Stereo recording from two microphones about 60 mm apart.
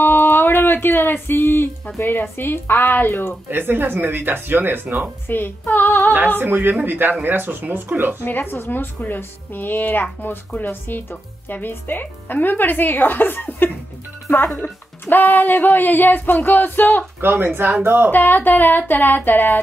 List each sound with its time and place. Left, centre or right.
0.0 s music: left
2.3 s speech: left
3.4 s speech: right
5.3 s music: left
6.4 s speech: right
8.3 s speech: left
17.2 s speech: right
18.1 s speech: left